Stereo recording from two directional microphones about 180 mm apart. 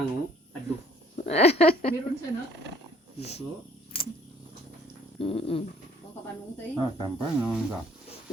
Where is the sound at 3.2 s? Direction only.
35° left (ahead or behind).